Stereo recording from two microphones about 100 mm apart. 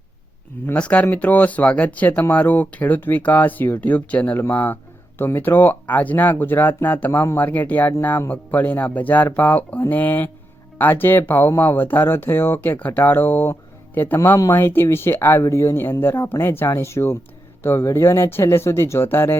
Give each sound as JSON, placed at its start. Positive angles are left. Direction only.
{"t": 0.7, "sound": "speech", "side_deg": 15}
{"t": 14.2, "sound": "speech", "side_deg": 35}
{"t": 14.5, "sound": "speech", "side_deg": 20}